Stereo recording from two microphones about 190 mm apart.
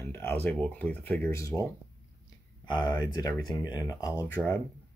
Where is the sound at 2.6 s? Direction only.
20° left (ahead or behind).